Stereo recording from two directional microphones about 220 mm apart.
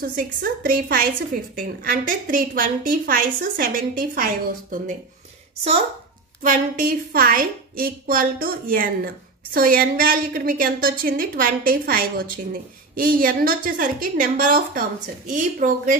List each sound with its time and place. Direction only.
0.1 s a woman's voice: 40° right (ahead or behind)
6.4 s a woman's voice: 40° right (ahead or behind)